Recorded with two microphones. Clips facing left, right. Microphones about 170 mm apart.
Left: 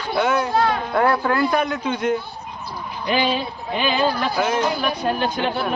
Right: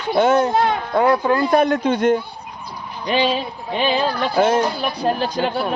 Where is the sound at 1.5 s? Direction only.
35° right (ahead or behind).